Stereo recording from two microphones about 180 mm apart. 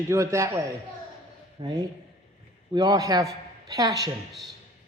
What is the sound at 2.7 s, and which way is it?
Speech, 20° right (ahead or behind).